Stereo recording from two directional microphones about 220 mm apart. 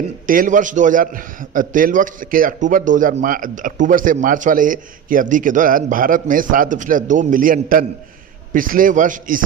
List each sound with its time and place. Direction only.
0.3 s a man's voice: 35° right (ahead or behind)